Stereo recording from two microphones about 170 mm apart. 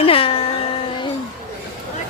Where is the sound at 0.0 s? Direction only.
35° left (ahead or behind).